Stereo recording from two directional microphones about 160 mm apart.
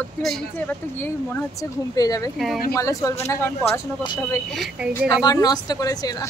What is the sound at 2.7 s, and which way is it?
Speech, 20° left (ahead or behind).